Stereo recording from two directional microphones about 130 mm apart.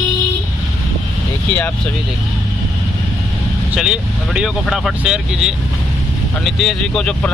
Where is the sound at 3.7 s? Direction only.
5° right (ahead or behind).